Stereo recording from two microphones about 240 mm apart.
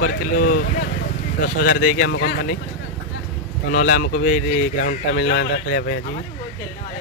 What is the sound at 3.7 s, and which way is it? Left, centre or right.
Speech, left.